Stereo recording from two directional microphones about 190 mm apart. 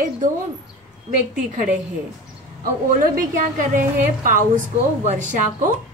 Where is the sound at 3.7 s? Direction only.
45° right (ahead or behind).